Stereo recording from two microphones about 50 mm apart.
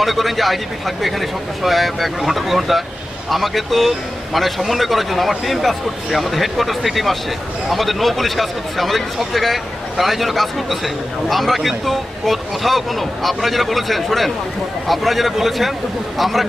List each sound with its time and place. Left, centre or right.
0.0 s speech: centre